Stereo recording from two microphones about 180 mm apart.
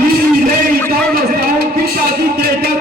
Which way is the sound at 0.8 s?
55° right (ahead or behind).